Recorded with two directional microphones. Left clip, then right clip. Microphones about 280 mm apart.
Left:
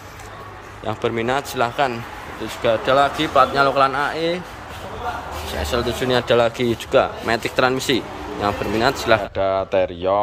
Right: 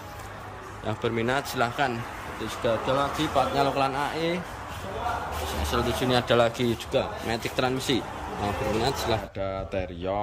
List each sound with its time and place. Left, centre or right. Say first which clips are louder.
0.8 s speech: left 6 dB; centre
5.7 s speech: left 5 dB; centre